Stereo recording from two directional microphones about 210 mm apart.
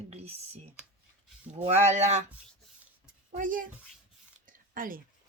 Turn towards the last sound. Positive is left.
turn(degrees=-40)  # may be behind; listen again after turning